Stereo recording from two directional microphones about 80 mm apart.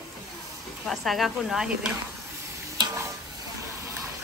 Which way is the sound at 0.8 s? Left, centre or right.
Centre.